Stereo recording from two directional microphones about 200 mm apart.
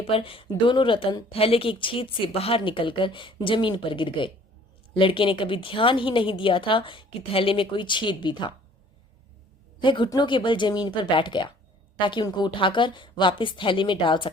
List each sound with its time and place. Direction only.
0.0 s a woman's voice: 25° left (ahead or behind)
9.8 s a woman's voice: 25° left (ahead or behind)